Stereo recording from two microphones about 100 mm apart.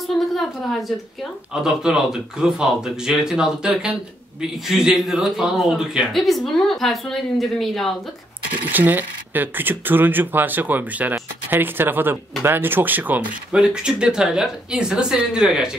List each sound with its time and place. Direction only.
0.0 s a woman's voice: centre (ahead or behind)
8.7 s speech: 20° right (ahead or behind)